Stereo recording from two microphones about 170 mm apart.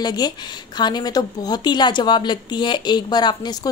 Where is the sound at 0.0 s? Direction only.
25° left (ahead or behind).